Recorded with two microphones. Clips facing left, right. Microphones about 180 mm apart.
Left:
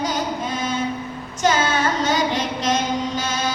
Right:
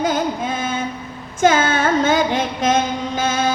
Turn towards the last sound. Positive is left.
turn(degrees=-50)  # may be behind; listen again after turning